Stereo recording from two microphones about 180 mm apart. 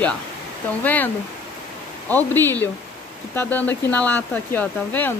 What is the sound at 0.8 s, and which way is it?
Speech, 10° left (ahead or behind).